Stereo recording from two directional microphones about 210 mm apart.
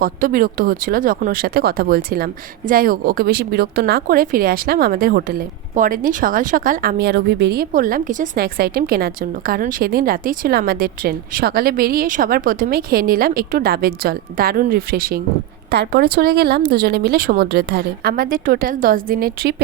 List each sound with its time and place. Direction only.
0.0 s speech: 40° right (ahead or behind)